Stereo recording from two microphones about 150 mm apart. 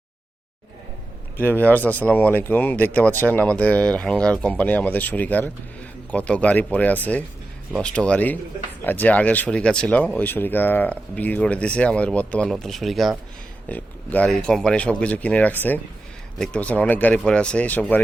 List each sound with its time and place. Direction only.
1.4 s speech: 10° left (ahead or behind)
13.7 s speech: 10° left (ahead or behind)